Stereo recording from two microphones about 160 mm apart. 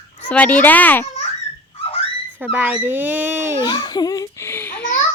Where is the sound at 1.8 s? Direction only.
35° left (ahead or behind).